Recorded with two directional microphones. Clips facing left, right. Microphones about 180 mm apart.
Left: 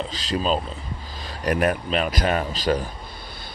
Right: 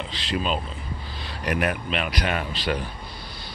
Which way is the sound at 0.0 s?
40° left (ahead or behind).